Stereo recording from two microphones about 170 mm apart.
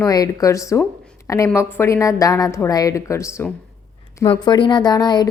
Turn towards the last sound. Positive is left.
turn(degrees=25)  # may be behind; listen again after turning